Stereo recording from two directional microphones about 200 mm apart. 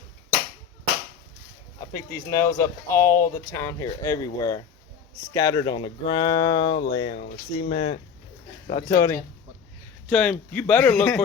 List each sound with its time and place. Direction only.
1.9 s speech: 15° left (ahead or behind); by 7.9 s 30° left (ahead or behind)
8.7 s speech: 15° left (ahead or behind)